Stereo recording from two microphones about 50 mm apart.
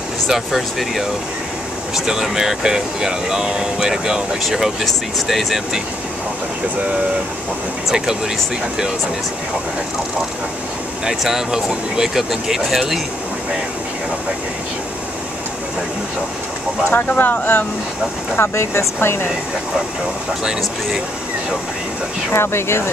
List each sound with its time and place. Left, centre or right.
0.3 s speech: centre
11.1 s speech: centre
16.9 s speech: left
18.4 s speech: left
22.3 s speech: left